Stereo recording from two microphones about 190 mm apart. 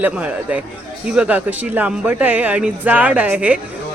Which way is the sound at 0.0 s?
5° right (ahead or behind).